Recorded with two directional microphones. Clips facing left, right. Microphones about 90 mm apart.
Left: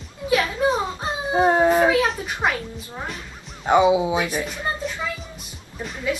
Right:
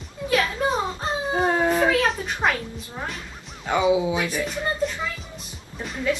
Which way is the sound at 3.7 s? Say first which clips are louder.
Left 4 dB; 25° left (ahead or behind).